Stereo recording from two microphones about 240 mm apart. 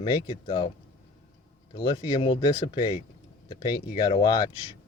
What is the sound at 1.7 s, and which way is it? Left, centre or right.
Speech, centre.